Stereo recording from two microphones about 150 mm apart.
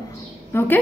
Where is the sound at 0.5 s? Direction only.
15° left (ahead or behind).